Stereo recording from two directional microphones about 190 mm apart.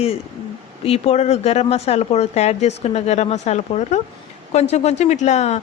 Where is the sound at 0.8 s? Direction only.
30° left (ahead or behind).